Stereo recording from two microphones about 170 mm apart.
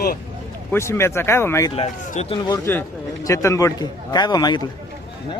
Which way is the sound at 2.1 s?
40° left (ahead or behind).